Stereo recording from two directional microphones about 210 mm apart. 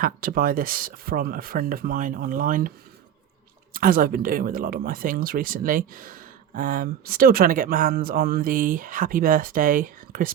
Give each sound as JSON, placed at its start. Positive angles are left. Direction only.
{"t": 0.0, "sound": "speech", "side_deg": -45}